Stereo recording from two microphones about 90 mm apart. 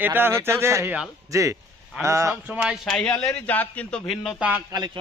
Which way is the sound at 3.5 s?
15° left (ahead or behind).